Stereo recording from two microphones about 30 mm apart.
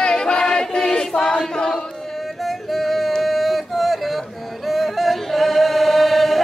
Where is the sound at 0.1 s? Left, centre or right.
Left.